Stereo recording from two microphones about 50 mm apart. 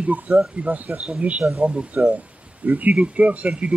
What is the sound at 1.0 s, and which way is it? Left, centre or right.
Speech, centre.